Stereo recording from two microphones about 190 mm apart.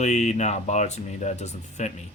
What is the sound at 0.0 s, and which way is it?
Speech, 35° left (ahead or behind).